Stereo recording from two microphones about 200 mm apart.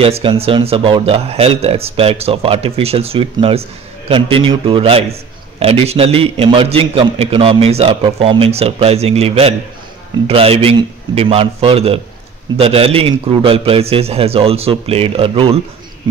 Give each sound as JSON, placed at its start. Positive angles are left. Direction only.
{"t": 0.0, "sound": "a man's voice", "side_deg": -25}